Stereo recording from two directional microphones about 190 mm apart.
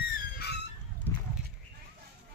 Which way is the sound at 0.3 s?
60° left (ahead or behind).